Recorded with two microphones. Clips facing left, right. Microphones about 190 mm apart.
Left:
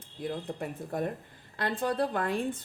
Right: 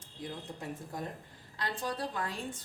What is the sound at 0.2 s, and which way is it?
A woman's voice, 60° left (ahead or behind).